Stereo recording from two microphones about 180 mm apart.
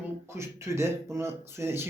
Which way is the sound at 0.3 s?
15° right (ahead or behind).